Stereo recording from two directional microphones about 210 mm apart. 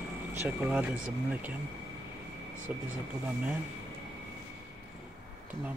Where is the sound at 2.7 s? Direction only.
10° right (ahead or behind).